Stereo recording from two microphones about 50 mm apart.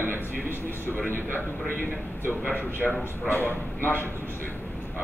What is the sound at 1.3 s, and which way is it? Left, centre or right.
Speech, left.